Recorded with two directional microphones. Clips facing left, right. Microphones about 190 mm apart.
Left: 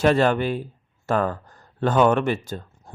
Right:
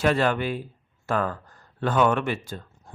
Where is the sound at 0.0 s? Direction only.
45° left (ahead or behind).